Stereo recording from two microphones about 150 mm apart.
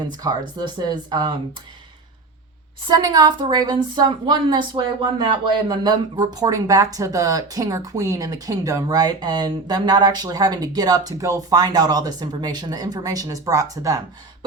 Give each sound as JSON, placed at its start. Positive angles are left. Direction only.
{"t": 0.1, "sound": "speech", "side_deg": -25}
{"t": 2.8, "sound": "speech", "side_deg": -25}